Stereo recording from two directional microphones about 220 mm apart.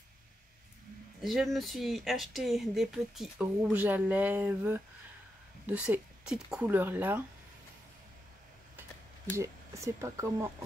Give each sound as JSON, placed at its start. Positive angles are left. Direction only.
{"t": 1.2, "sound": "speech", "side_deg": 0}
{"t": 9.4, "sound": "speech", "side_deg": -15}